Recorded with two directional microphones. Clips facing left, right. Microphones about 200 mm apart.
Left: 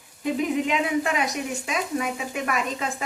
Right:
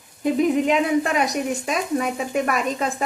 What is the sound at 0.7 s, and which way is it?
Speech, 45° right (ahead or behind).